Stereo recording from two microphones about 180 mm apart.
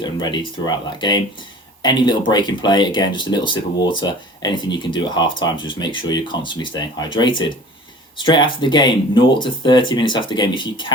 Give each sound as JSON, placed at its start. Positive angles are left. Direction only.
{"t": 0.0, "sound": "speech", "side_deg": 25}